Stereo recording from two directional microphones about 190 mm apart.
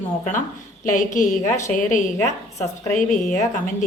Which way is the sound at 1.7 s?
45° left (ahead or behind).